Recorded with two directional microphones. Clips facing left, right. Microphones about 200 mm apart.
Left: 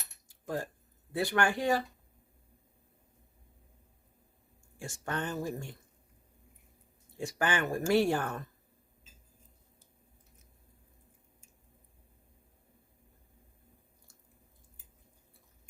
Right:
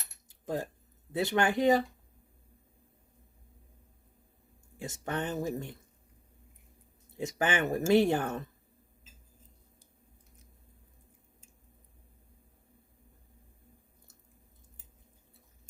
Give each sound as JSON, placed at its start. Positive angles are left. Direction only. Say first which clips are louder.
{"t": 0.3, "sound": "keys jangling", "louder": "right 2 dB", "side_deg": -20}
{"t": 1.1, "sound": "speech", "louder": "right 2 dB", "side_deg": -20}
{"t": 4.8, "sound": "speech", "louder": "right 2 dB", "side_deg": -20}
{"t": 7.2, "sound": "speech", "louder": "right 2 dB", "side_deg": -20}